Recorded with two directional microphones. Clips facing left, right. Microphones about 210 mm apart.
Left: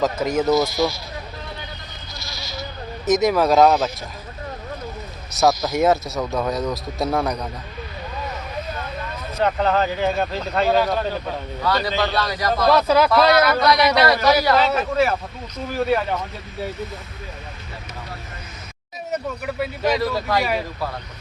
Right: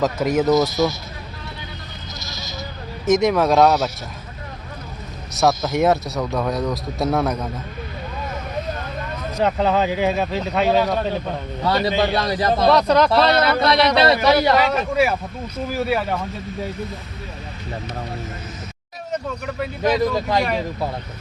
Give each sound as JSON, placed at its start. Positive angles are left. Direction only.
{"t": 0.0, "sound": "speech", "side_deg": 0}
{"t": 0.7, "sound": "a man's voice", "side_deg": -20}
{"t": 2.1, "sound": "bleat", "side_deg": -20}
{"t": 3.1, "sound": "speech", "side_deg": 0}
{"t": 5.3, "sound": "speech", "side_deg": 0}
{"t": 9.4, "sound": "speech", "side_deg": -5}
{"t": 11.6, "sound": "a man's voice", "side_deg": -20}
{"t": 12.7, "sound": "speech", "side_deg": 5}
{"t": 13.1, "sound": "a man's voice", "side_deg": -30}
{"t": 14.4, "sound": "a man's voice", "side_deg": -15}
{"t": 15.7, "sound": "speech", "side_deg": -5}
{"t": 19.1, "sound": "speech", "side_deg": 10}